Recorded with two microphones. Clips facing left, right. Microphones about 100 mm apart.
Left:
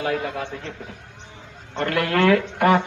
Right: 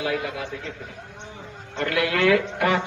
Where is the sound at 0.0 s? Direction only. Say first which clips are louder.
Left 2 dB; 45° left (ahead or behind).